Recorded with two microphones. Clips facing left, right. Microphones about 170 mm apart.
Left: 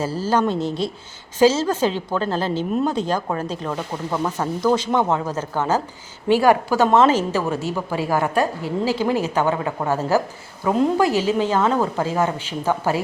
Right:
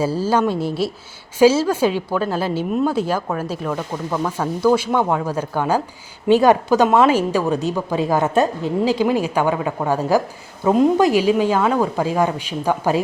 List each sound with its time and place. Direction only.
0.0 s a woman's voice: 10° right (ahead or behind)
3.7 s speech: 5° left (ahead or behind)
4.3 s a woman's voice: 10° right (ahead or behind)